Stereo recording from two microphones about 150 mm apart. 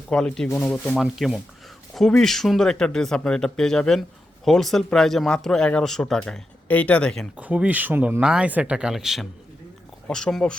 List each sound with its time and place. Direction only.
0.1 s speech: 5° left (ahead or behind)
0.4 s speech: 20° left (ahead or behind)
0.7 s speech: centre (ahead or behind)
7.3 s speech: 10° right (ahead or behind)